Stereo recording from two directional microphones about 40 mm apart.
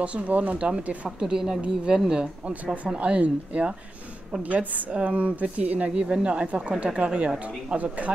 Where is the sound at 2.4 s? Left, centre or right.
Right.